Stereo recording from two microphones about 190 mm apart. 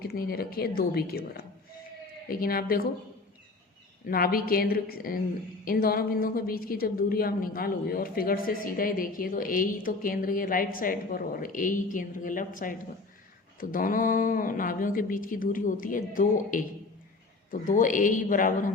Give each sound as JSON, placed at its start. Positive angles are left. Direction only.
{"t": 0.0, "sound": "a woman's voice", "side_deg": 50}
{"t": 4.1, "sound": "a woman's voice", "side_deg": 50}